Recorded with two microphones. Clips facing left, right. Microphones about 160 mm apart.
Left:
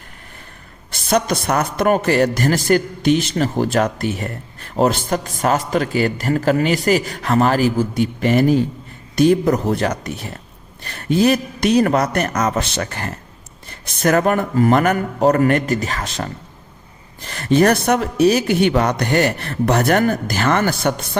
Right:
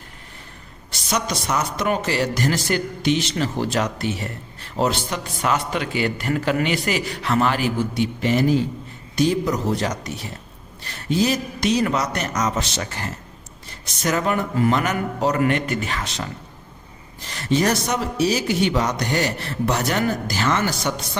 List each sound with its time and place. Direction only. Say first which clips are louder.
0.9 s a woman's voice: left 7 dB; 55° left (ahead or behind)